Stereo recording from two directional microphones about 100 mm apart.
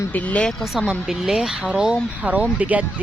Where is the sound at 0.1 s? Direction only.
15° left (ahead or behind).